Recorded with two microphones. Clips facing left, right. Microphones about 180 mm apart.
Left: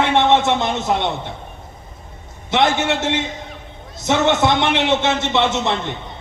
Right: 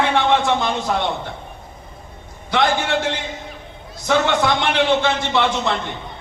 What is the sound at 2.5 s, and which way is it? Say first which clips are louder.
A man's voice: left 1 dB; 25° left (ahead or behind).